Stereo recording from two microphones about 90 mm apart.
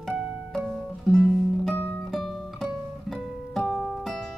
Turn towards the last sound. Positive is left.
turn(degrees=5)  # may be behind; listen again after turning